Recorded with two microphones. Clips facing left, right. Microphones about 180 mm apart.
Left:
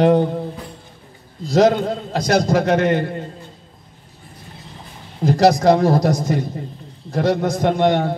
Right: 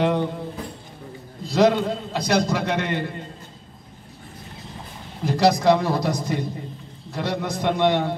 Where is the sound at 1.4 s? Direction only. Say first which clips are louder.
Left 4 dB; 45° left (ahead or behind).